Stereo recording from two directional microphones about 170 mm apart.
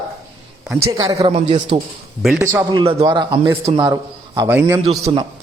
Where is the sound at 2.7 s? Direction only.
25° right (ahead or behind).